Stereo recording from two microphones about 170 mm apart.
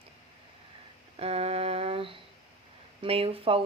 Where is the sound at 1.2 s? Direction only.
35° right (ahead or behind).